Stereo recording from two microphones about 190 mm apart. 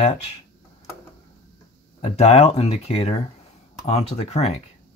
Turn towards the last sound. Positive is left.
turn(degrees=35)  # may be behind; listen again after turning